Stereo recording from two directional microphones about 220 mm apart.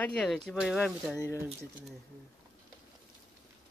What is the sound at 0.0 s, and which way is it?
Speech, 5° left (ahead or behind).